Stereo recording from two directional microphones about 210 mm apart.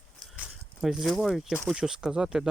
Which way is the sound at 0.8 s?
Centre (ahead or behind).